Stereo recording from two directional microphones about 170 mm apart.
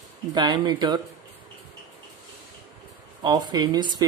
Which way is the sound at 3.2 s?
25° right (ahead or behind).